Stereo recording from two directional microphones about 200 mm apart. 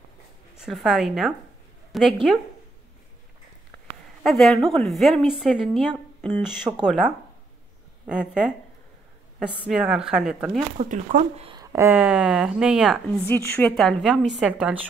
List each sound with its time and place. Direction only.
0.6 s a woman's voice: centre (ahead or behind)
4.2 s a woman's voice: centre (ahead or behind)
9.7 s a woman's voice: 5° right (ahead or behind)
10.8 s speech: 35° right (ahead or behind)
11.5 s a woman's voice: 15° right (ahead or behind)